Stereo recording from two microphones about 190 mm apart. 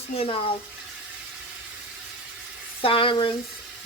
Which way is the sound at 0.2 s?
30° left (ahead or behind).